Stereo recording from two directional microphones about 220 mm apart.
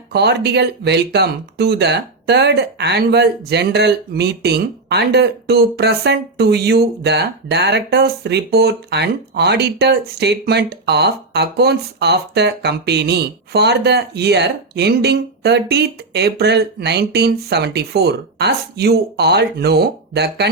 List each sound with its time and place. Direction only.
0.1 s speech: 50° right (ahead or behind)